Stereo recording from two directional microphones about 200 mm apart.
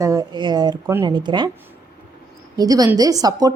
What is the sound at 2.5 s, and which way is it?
Speech, 20° right (ahead or behind).